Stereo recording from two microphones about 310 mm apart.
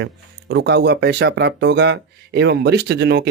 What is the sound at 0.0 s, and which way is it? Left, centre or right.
Speech, right.